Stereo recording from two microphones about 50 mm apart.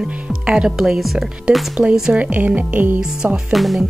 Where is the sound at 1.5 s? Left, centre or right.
Centre; by 3.0 s right.